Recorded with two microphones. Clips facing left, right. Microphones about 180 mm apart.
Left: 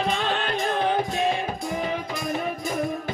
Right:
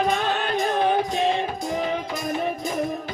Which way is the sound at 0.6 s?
15° right (ahead or behind).